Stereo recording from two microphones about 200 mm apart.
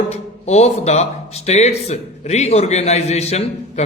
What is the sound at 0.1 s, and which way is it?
A man's voice, 30° left (ahead or behind).